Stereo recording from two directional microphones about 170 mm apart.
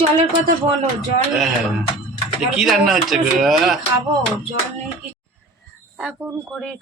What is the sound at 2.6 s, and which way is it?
Speech, centre (ahead or behind).